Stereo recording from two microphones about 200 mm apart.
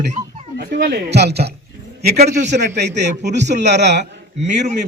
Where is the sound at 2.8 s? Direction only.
60° right (ahead or behind).